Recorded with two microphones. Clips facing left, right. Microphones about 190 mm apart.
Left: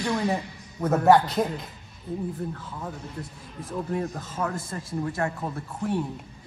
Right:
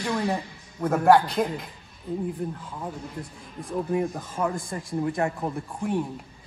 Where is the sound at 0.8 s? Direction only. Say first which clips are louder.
Left 1 dB; 5° left (ahead or behind).